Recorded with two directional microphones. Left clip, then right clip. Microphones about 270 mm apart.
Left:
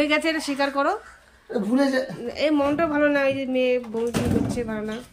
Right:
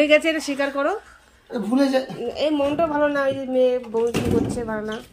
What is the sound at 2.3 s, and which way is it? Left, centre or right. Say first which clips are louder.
Speech: even; centre.